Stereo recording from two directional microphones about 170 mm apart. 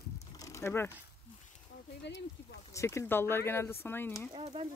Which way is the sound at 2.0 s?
90° left.